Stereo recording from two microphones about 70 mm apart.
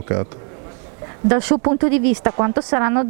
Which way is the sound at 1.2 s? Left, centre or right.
Right.